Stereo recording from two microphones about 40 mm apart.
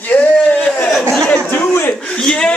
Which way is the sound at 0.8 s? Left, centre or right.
Centre.